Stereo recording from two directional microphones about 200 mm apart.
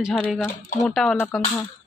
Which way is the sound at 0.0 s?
Centre (ahead or behind).